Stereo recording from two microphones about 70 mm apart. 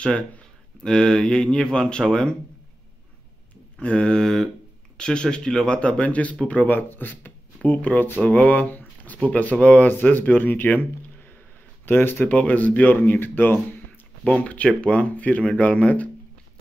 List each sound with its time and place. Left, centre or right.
0.8 s speech: centre
3.8 s speech: centre; by 13.6 s left
14.2 s speech: centre